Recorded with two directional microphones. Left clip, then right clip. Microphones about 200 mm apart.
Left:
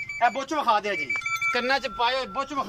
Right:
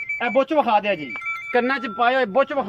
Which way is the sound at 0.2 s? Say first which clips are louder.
Right 5 dB; 50° right (ahead or behind).